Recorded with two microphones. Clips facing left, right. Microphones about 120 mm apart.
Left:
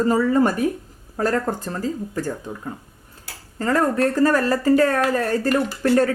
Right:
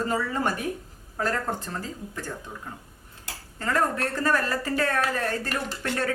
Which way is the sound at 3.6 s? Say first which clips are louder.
Left 7 dB; 40° left (ahead or behind).